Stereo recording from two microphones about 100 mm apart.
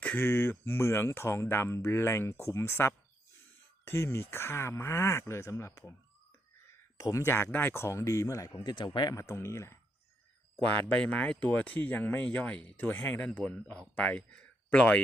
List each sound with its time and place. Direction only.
0.0 s speech: 15° left (ahead or behind)
6.9 s speech: 35° left (ahead or behind)
8.5 s speech: 50° left (ahead or behind)
9.1 s speech: 25° left (ahead or behind)
10.6 s speech: 10° left (ahead or behind)